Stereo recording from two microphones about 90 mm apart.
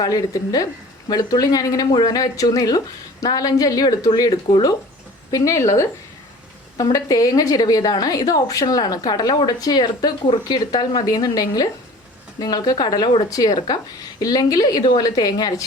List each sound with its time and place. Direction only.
0.0 s speech: 45° left (ahead or behind)
5.3 s speech: 35° left (ahead or behind)